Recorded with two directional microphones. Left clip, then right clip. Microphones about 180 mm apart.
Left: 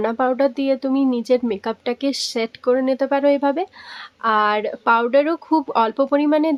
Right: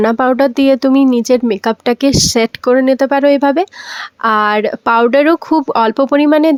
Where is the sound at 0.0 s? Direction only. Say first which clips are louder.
Right 7 dB; 45° right (ahead or behind).